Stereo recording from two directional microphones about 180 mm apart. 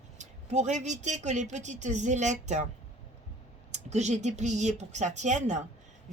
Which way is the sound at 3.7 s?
40° right (ahead or behind).